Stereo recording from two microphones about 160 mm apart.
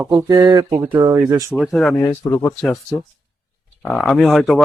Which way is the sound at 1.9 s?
20° left (ahead or behind).